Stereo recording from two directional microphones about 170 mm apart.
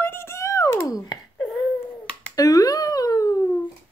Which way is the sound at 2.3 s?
20° left (ahead or behind).